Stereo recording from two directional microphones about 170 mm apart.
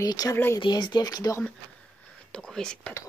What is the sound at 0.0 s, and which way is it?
Speech, 20° left (ahead or behind).